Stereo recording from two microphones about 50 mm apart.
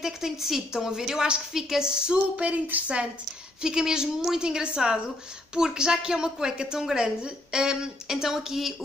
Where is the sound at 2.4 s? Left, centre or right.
Right.